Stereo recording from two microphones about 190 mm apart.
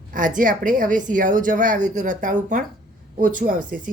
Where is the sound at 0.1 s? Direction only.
45° right (ahead or behind).